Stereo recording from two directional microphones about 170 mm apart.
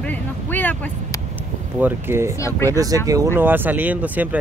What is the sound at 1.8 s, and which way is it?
Speech, 10° right (ahead or behind).